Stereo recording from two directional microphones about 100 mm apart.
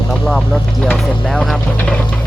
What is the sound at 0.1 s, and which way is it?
Vehicle, 5° left (ahead or behind).